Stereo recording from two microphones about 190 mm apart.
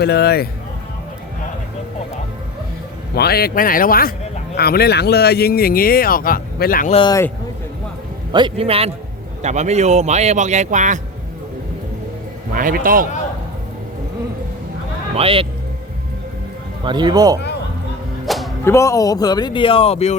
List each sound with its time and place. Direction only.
0.0 s speech: 60° left (ahead or behind)
3.2 s speech: 55° left (ahead or behind)
6.9 s speech: 25° left (ahead or behind)
8.3 s speech: 25° right (ahead or behind); by 11.0 s 40° right (ahead or behind)
12.5 s speech: 45° right (ahead or behind)
15.1 s a man's voice: 30° right (ahead or behind)
16.8 s speech: 25° right (ahead or behind)
18.3 s music: centre (ahead or behind)
18.6 s speech: 15° left (ahead or behind); by 20.1 s 35° left (ahead or behind)